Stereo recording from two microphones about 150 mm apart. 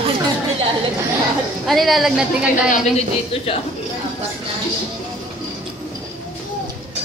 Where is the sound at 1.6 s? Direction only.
Centre (ahead or behind).